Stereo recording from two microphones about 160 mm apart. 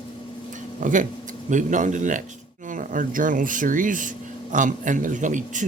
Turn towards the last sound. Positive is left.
turn(degrees=-50)  # may be behind; listen again after turning